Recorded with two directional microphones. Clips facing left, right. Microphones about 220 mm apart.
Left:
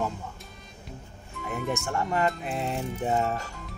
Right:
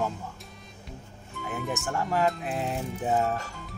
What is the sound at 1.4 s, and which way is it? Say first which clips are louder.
Speech: left 2 dB; centre (ahead or behind).